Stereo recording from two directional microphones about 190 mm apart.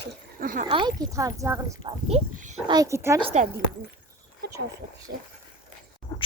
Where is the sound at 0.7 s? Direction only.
25° right (ahead or behind).